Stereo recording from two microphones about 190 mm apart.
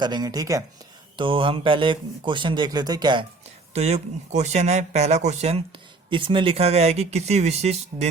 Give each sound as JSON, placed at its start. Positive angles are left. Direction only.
{"t": 0.0, "sound": "speech", "side_deg": -20}
{"t": 3.8, "sound": "speech", "side_deg": -35}